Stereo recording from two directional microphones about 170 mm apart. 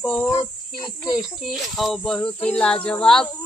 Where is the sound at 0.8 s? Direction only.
25° left (ahead or behind).